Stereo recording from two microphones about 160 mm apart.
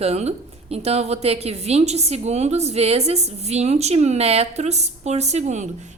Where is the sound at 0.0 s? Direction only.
40° right (ahead or behind).